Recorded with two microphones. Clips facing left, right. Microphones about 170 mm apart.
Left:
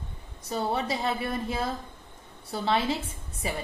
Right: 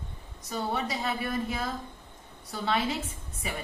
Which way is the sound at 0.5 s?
30° left (ahead or behind).